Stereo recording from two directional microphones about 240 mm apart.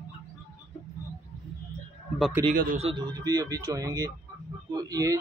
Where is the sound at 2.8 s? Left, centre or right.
Centre.